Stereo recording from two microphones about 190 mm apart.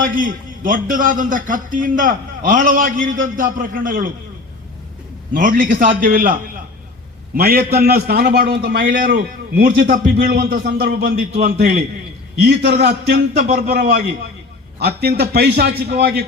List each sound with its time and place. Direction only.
0.0 s a man's voice: 45° right (ahead or behind)
5.3 s a man's voice: 45° right (ahead or behind)
7.3 s a man's voice: 55° right (ahead or behind)
10.5 s a man's voice: 60° right (ahead or behind)
13.5 s a man's voice: 40° right (ahead or behind); by 16.2 s 55° right (ahead or behind)